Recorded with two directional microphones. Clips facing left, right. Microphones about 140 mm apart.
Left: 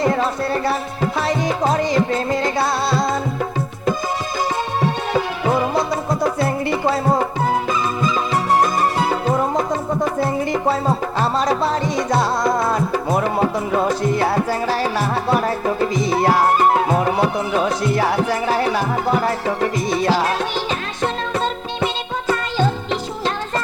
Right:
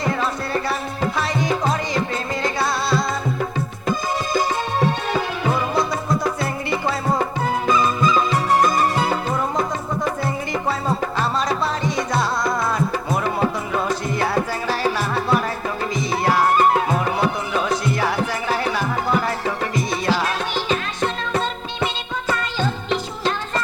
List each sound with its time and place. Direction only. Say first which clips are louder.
1.7 s music: left 5 dB; 35° left (ahead or behind)
6.4 s music: left 4 dB; 30° left (ahead or behind)
11.2 s music: left 6 dB; 35° left (ahead or behind)
17.6 s music: left 2 dB; 35° left (ahead or behind)
20.0 s music: left 5 dB; 35° left (ahead or behind)